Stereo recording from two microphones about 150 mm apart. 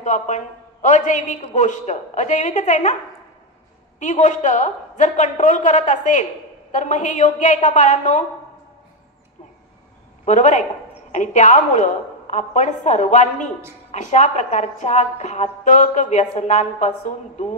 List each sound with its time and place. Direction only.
0.0 s a woman's voice: 55° left (ahead or behind)
4.0 s a woman's voice: 55° left (ahead or behind)
10.2 s a woman's voice: 55° left (ahead or behind)